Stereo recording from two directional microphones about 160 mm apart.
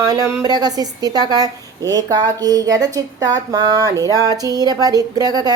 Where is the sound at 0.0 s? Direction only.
25° right (ahead or behind).